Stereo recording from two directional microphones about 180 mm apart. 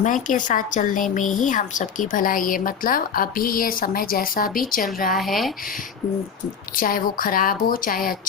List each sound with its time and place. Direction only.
0.0 s a woman's voice: 45° left (ahead or behind)
5.1 s speech: centre (ahead or behind)
6.7 s a woman's voice: 50° left (ahead or behind)